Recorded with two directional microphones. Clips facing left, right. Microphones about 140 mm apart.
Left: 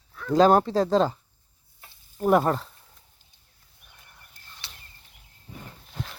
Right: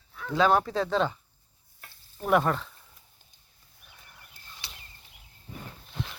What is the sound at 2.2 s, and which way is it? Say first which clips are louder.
Speech: left 4 dB; 35° left (ahead or behind).